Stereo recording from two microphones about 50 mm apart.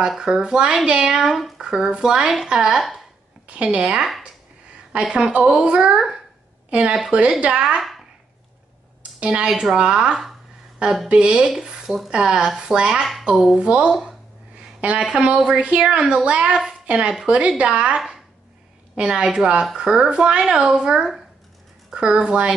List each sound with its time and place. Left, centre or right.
0.2 s a woman's voice: centre
1.1 s speech: centre
1.6 s a woman's voice: centre
9.2 s speech: centre
9.5 s speech: centre
9.8 s a woman's voice: centre
15.0 s speech: centre
15.9 s a woman's voice: right